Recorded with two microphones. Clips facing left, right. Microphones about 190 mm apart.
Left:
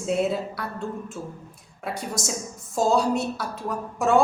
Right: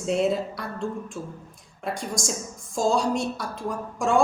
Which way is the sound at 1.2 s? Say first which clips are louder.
Even; 20° left (ahead or behind).